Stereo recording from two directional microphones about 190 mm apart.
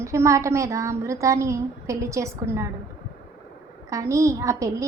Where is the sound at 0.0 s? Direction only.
15° right (ahead or behind).